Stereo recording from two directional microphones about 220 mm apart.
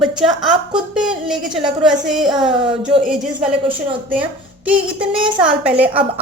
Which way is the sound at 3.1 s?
5° right (ahead or behind).